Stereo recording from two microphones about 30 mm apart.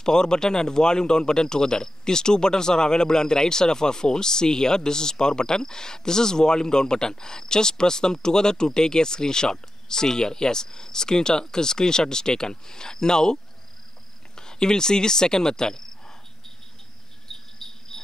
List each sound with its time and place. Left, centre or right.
0.0 s speech: left
17.3 s cricket: centre